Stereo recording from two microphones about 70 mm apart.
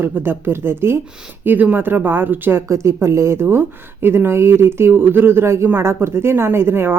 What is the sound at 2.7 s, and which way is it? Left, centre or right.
Speech, right.